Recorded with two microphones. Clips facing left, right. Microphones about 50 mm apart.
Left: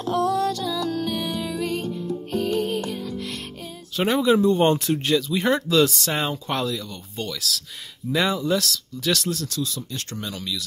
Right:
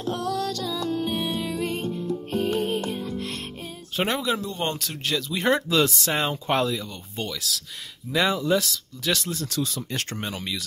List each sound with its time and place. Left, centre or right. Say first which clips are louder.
0.2 s music: left 5 dB; left
0.7 s music: left 1 dB; right
4.2 s speech: left 9 dB; centre
5.0 s speech: even; centre
9.5 s speech: right 1 dB; right